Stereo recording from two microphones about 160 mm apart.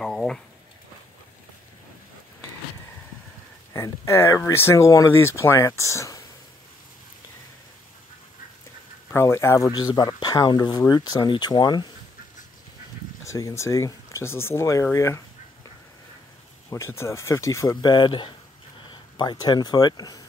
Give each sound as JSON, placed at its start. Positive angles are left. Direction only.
{"t": 0.0, "sound": "a sound", "side_deg": 5}
{"t": 3.7, "sound": "speech", "side_deg": 20}
{"t": 9.1, "sound": "speech", "side_deg": 15}
{"t": 13.2, "sound": "speech", "side_deg": 20}
{"t": 16.7, "sound": "speech", "side_deg": 15}